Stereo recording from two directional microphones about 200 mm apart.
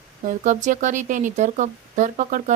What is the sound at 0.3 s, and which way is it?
A woman's voice, 40° right (ahead or behind).